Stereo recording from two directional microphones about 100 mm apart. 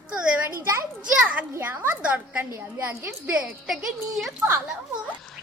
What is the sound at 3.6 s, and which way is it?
Speech, centre (ahead or behind).